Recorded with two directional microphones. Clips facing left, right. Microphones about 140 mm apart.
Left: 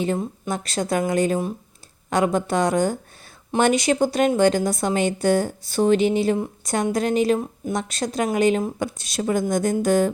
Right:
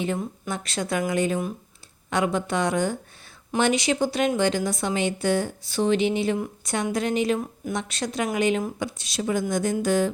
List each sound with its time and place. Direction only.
0.0 s speech: 35° left (ahead or behind)